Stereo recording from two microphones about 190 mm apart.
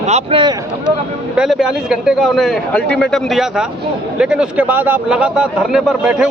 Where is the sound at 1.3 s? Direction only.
Centre (ahead or behind).